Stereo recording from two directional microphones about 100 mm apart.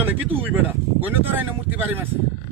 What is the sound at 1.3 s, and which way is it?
Speech, 20° right (ahead or behind).